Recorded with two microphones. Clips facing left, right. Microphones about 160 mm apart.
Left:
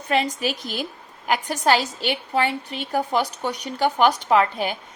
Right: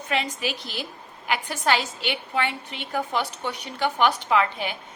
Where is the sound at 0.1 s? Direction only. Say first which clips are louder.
Left 5 dB; 40° left (ahead or behind).